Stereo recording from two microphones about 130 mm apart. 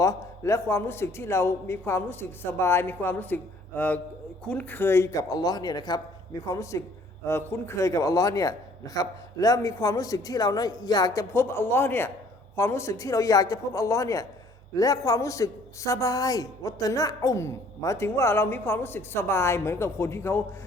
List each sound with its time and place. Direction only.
0.0 s a man's voice: 25° left (ahead or behind)